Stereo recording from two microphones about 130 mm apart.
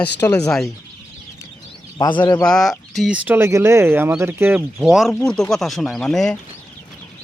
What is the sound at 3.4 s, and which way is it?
Speech, 20° right (ahead or behind).